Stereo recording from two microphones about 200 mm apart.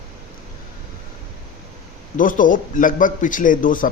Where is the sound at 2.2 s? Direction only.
40° left (ahead or behind).